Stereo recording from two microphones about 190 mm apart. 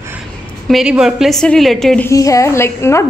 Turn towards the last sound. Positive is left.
turn(degrees=15)  # may be behind; listen again after turning